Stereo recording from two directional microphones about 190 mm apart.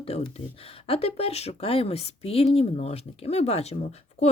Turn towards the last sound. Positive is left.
turn(degrees=35)  # may be behind; listen again after turning